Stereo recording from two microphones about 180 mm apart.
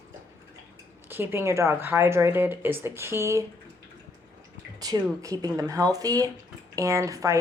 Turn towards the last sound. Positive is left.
turn(degrees=-20)  # may be behind; listen again after turning